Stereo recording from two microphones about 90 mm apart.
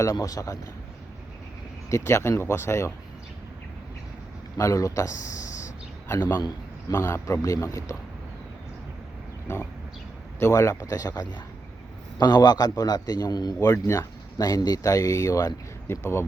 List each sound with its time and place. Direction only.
0.0 s speech: 40° left (ahead or behind)
1.9 s speech: 30° left (ahead or behind)
4.5 s speech: 35° left (ahead or behind)
5.6 s a sound: 30° left (ahead or behind)
6.9 s speech: 35° left (ahead or behind)
10.4 s a man's voice: 35° left (ahead or behind)
13.7 s speech: 30° left (ahead or behind)
14.0 s speech: 45° left (ahead or behind)
15.9 s speech: 30° left (ahead or behind)